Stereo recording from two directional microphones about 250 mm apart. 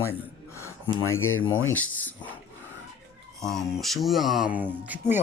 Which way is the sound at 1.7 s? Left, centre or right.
Centre.